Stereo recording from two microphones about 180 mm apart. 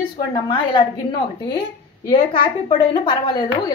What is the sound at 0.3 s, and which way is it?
Speech, 25° left (ahead or behind).